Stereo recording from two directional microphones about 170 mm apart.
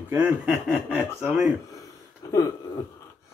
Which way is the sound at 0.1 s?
10° right (ahead or behind).